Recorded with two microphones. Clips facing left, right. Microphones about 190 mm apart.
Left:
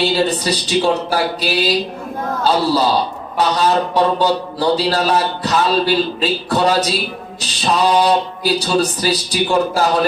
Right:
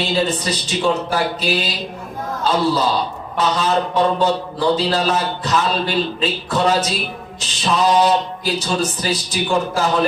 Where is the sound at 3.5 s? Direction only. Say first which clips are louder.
Left 3 dB; 35° left (ahead or behind).